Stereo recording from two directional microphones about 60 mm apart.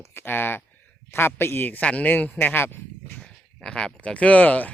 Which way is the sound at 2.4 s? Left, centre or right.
Left.